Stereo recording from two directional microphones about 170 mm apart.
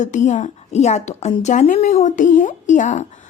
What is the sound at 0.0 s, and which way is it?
A woman's voice, 45° left (ahead or behind).